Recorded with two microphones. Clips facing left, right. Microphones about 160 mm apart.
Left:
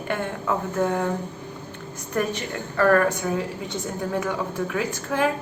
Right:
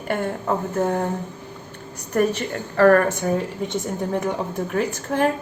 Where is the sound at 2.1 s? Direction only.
45° right (ahead or behind).